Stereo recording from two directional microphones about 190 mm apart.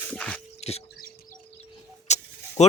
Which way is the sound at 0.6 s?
35° left (ahead or behind).